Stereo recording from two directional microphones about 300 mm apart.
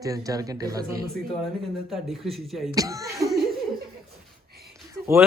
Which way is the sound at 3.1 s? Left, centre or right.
Centre.